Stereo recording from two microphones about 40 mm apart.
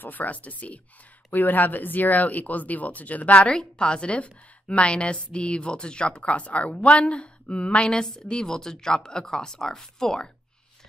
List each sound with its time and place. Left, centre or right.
0.0 s speech: left
1.3 s speech: left
3.5 s a woman's voice: left
8.0 s speech: centre